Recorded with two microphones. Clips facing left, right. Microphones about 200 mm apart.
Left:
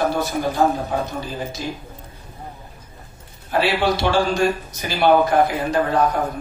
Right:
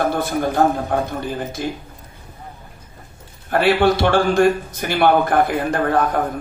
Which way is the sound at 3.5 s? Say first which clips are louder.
Right 4 dB; 55° right (ahead or behind).